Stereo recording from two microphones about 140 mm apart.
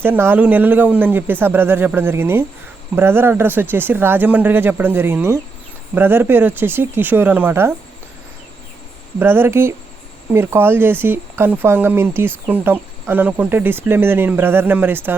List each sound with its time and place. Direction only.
0.0 s speech: 15° right (ahead or behind)
9.1 s speech: 15° right (ahead or behind)